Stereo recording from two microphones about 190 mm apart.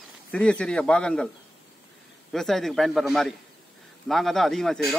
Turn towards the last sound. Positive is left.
turn(degrees=0)  # may be behind; listen again after turning